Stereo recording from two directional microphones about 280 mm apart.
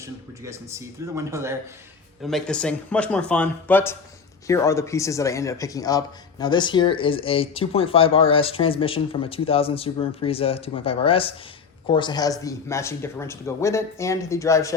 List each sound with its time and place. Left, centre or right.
0.0 s speech: centre
2.2 s speech: centre